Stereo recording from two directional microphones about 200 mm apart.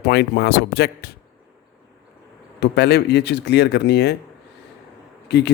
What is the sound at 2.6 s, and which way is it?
Speech, 55° left (ahead or behind).